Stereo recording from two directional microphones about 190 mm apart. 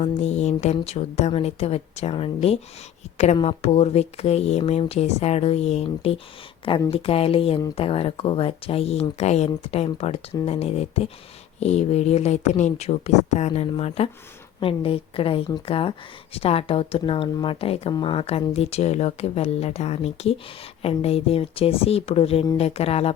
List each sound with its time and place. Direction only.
0.0 s speech: 35° left (ahead or behind)